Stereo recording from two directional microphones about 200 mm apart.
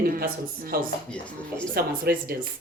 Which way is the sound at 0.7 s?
45° right (ahead or behind).